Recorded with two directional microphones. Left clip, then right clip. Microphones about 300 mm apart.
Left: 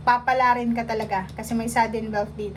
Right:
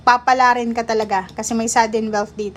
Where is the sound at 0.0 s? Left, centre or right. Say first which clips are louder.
Right 6 dB; centre.